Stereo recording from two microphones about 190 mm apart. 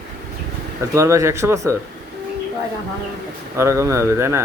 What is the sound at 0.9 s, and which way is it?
Speech, 15° right (ahead or behind).